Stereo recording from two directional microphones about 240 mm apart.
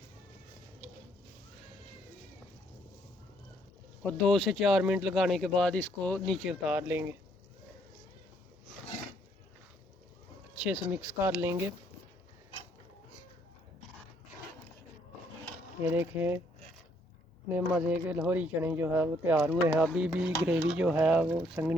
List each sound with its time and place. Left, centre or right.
4.0 s speech: centre
10.7 s speech: centre
15.8 s speech: centre
17.7 s speech: centre